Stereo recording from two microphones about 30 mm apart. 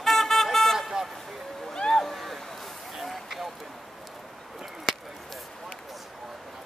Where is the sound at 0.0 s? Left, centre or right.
Centre.